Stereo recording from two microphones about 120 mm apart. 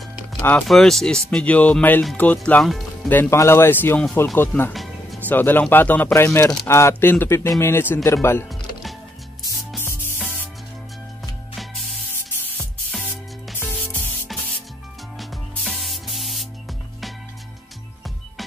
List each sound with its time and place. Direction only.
0.4 s speech: 10° left (ahead or behind)
2.6 s speech: centre (ahead or behind)
3.1 s speech: 20° left (ahead or behind)
12.9 s music: centre (ahead or behind)
13.6 s music: 15° left (ahead or behind)
15.1 s spray: centre (ahead or behind)